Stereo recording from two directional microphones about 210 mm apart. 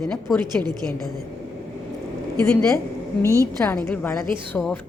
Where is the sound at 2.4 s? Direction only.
10° left (ahead or behind).